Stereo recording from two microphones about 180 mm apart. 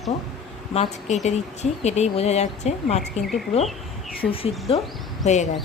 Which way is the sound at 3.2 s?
Centre (ahead or behind).